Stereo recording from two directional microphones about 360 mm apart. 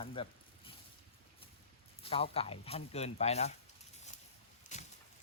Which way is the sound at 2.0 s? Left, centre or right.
Centre.